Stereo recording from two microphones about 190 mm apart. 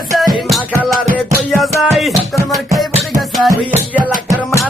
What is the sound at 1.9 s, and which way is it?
Music, centre (ahead or behind).